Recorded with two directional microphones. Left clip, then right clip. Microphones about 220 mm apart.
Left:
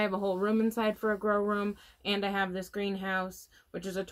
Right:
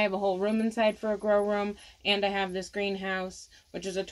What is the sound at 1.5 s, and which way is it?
Speech, 20° right (ahead or behind).